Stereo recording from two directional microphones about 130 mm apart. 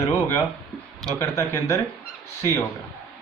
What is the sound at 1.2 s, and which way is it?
Speech, 25° left (ahead or behind).